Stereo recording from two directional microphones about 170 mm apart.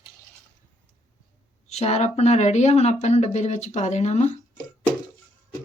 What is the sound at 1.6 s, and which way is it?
Speech, 40° left (ahead or behind).